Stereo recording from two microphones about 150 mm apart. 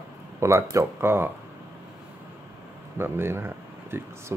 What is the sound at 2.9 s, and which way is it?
Speech, 15° right (ahead or behind).